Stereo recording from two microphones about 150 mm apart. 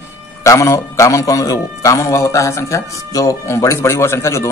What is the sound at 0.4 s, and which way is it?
A man's voice, 20° left (ahead or behind).